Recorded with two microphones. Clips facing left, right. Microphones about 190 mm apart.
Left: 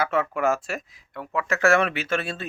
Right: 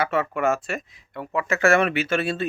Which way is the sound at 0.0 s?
Centre (ahead or behind).